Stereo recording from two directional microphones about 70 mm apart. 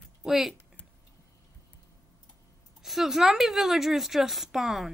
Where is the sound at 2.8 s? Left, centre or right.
Centre.